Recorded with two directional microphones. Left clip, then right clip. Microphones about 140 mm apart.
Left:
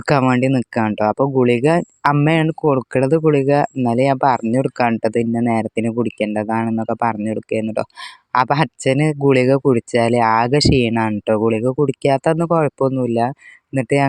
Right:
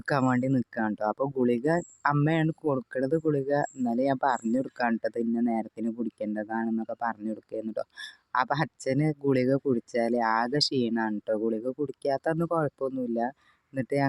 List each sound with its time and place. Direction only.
0.0 s speech: 50° left (ahead or behind)